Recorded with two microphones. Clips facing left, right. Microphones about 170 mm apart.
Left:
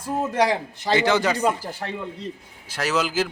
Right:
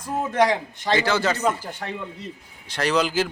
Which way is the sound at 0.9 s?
20° left (ahead or behind).